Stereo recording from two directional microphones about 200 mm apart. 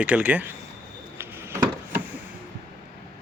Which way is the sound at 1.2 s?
10° right (ahead or behind).